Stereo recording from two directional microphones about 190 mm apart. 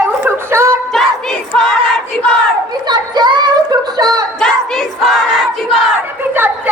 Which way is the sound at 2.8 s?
20° right (ahead or behind).